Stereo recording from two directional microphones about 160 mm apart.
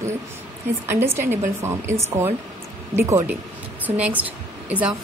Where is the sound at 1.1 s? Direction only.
15° right (ahead or behind).